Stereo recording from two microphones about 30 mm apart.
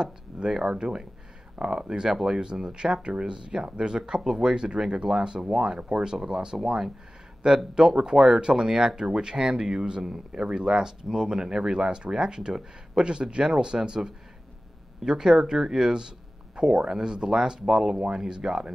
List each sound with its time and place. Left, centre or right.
0.5 s speech: centre
0.7 s speech: right
4.2 s speech: centre
5.4 s speech: centre
6.4 s speech: right
10.0 s speech: centre
10.4 s speech: right
10.7 s speech: centre